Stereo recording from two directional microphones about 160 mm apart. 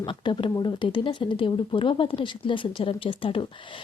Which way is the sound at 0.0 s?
30° left (ahead or behind).